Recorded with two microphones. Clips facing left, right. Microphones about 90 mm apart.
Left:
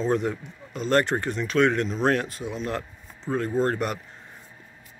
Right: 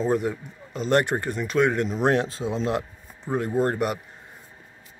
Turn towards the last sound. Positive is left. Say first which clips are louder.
# right 1 dB
turn(degrees=-10)  # may be behind; listen again after turning